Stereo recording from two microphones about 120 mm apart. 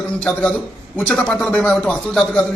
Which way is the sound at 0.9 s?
10° left (ahead or behind).